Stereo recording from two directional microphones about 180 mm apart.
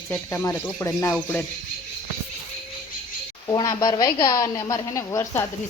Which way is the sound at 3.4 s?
20° left (ahead or behind).